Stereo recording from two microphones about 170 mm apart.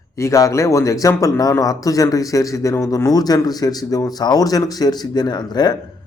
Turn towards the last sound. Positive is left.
turn(degrees=25)  # may be behind; listen again after turning